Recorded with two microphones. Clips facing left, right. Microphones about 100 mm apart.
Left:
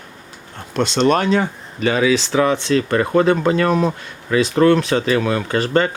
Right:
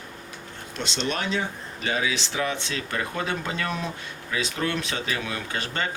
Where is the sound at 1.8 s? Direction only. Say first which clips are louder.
Left 11 dB; 90° left.